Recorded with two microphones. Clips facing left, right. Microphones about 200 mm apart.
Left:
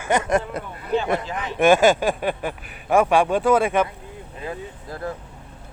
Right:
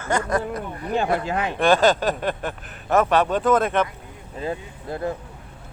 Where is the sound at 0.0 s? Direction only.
20° left (ahead or behind).